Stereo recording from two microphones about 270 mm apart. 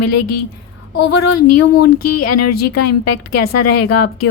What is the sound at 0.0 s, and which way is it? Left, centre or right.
A woman's voice, left.